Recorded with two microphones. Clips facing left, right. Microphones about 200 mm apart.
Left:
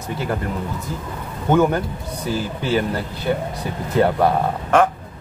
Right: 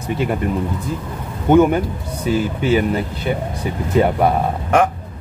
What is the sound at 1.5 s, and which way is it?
A man's voice, 15° right (ahead or behind).